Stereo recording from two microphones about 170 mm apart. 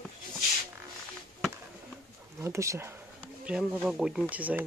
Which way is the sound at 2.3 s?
15° right (ahead or behind).